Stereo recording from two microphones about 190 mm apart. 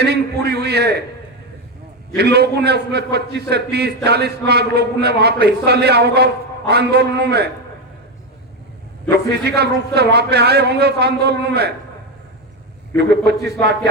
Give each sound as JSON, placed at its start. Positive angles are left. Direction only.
{"t": 0.0, "sound": "a sound", "side_deg": -60}
{"t": 2.1, "sound": "a man's voice", "side_deg": -60}
{"t": 9.0, "sound": "a man's voice", "side_deg": -60}
{"t": 13.0, "sound": "a man's voice", "side_deg": -60}